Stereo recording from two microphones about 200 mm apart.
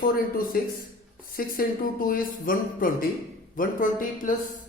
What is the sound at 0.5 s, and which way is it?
Speech, 50° left (ahead or behind).